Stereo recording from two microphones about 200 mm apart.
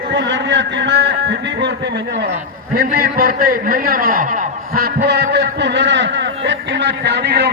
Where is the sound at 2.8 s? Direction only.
50° right (ahead or behind).